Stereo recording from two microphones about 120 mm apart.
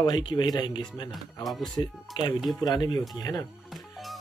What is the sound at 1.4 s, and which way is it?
Speech, centre (ahead or behind).